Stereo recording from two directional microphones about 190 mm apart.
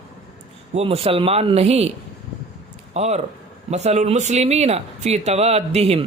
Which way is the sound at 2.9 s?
35° right (ahead or behind).